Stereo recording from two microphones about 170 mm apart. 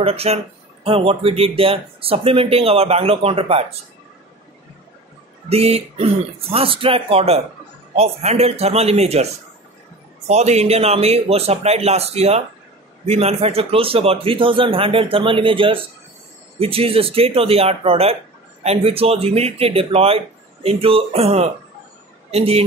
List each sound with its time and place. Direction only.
0.0 s speech: 35° right (ahead or behind)
5.5 s speech: 35° right (ahead or behind)